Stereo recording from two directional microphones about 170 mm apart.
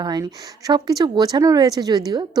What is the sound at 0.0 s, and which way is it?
Speech, 25° right (ahead or behind).